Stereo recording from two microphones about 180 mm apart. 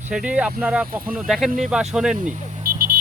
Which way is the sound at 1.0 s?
50° right (ahead or behind).